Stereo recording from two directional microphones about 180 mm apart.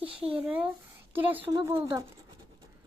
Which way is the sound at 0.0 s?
5° right (ahead or behind).